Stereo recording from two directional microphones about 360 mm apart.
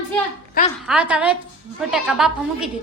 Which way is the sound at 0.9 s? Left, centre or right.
Centre.